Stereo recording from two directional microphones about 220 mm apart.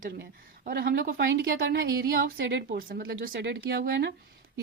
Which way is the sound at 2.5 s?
40° right (ahead or behind).